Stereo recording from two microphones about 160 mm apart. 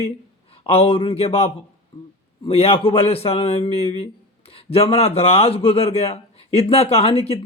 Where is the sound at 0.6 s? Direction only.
35° left (ahead or behind).